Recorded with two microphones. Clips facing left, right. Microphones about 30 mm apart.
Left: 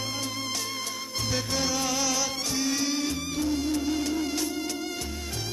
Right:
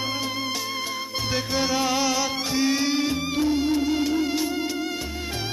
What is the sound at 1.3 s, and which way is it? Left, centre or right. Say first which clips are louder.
Music: right 4 dB; right.